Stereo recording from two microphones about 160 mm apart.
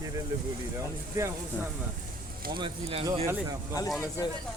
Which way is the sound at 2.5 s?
30° right (ahead or behind).